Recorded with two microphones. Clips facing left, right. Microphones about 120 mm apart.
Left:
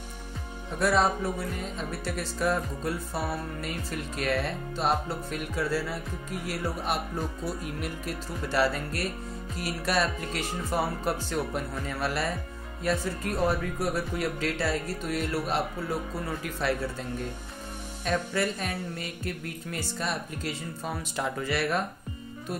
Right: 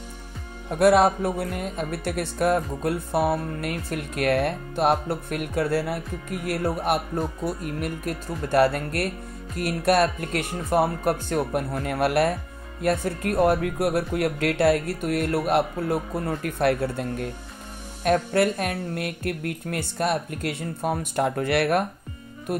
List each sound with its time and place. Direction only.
0.7 s speech: 60° right (ahead or behind)
11.7 s speech: 65° right (ahead or behind)